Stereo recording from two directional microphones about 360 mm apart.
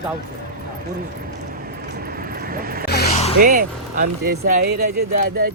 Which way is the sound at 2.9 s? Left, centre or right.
Left.